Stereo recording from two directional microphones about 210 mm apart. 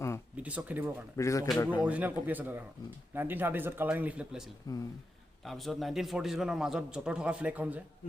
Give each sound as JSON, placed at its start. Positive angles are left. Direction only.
{"t": 0.3, "sound": "speech", "side_deg": -5}
{"t": 1.1, "sound": "speech", "side_deg": 15}
{"t": 1.8, "sound": "a man's voice", "side_deg": -5}
{"t": 4.7, "sound": "speech", "side_deg": 15}
{"t": 5.5, "sound": "a man's voice", "side_deg": 0}